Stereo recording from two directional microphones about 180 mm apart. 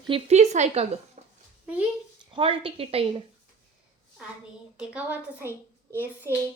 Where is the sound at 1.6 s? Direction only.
10° right (ahead or behind).